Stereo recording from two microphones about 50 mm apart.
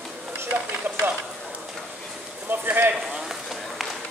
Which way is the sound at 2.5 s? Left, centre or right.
Right.